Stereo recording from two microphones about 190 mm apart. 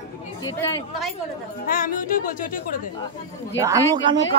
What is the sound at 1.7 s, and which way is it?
Speech, 45° left (ahead or behind).